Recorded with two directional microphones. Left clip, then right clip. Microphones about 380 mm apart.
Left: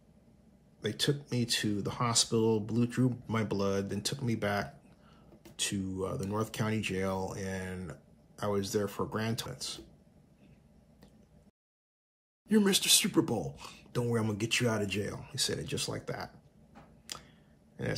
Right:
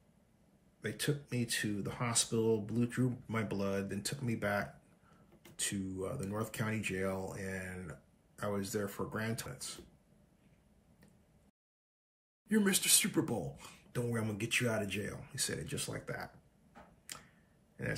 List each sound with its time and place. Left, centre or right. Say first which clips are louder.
0.7 s speech: left 6 dB; centre
12.4 s speech: left 5 dB; centre
17.1 s tick-tock: left 6 dB; centre